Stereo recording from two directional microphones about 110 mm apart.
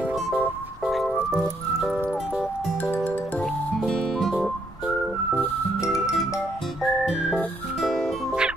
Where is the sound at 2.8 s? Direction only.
15° left (ahead or behind).